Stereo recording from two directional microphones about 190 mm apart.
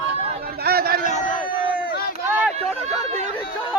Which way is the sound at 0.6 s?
55° right (ahead or behind).